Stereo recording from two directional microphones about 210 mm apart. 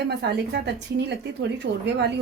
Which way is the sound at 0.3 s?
55° right (ahead or behind).